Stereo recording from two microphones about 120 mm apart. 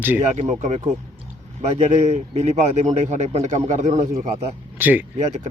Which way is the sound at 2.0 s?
65° right (ahead or behind).